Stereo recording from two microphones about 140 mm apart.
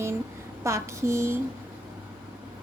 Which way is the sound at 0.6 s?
20° right (ahead or behind).